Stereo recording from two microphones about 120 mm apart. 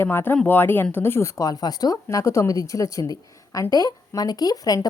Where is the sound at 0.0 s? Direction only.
20° left (ahead or behind).